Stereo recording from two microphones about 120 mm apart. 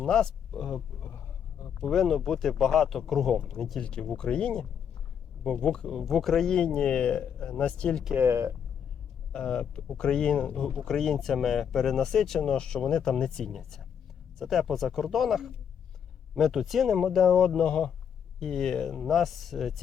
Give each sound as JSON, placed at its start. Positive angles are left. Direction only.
{"t": 0.0, "sound": "a sound", "side_deg": 5}
{"t": 1.8, "sound": "speech", "side_deg": 0}
{"t": 8.1, "sound": "speech", "side_deg": -20}
{"t": 9.3, "sound": "speech", "side_deg": 5}